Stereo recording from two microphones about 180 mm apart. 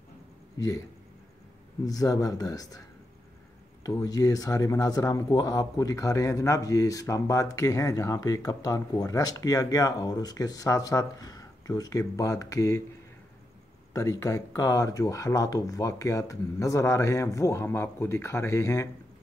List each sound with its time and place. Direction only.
0.6 s speech: 20° left (ahead or behind)
1.9 s speech: 20° left (ahead or behind)
3.8 s speech: 20° left (ahead or behind)
13.9 s speech: 20° left (ahead or behind)